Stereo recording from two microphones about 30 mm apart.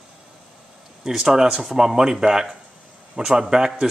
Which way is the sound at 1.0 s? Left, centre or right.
Centre.